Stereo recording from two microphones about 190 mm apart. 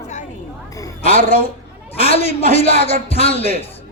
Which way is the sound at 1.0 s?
30° left (ahead or behind).